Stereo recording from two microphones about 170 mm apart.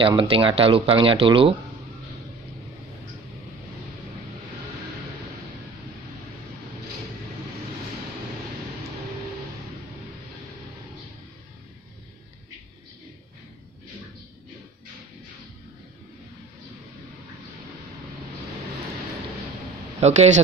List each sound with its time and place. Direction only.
0.0 s speech: 30° right (ahead or behind)
20.0 s speech: 40° right (ahead or behind)